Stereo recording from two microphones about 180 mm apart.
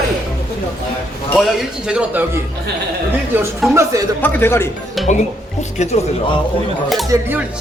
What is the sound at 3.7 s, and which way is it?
Speech, 15° right (ahead or behind).